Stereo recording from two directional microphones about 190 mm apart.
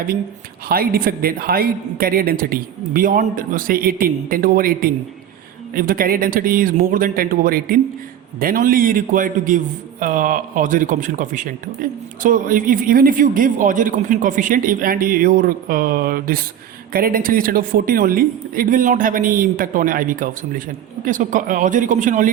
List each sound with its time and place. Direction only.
0.7 s speech: 50° right (ahead or behind)